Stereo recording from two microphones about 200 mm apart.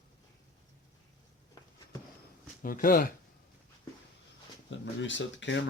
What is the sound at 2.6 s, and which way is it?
Speech, 45° left (ahead or behind).